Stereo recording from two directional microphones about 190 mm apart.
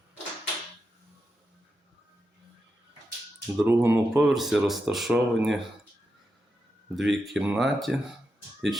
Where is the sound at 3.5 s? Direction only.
10° right (ahead or behind).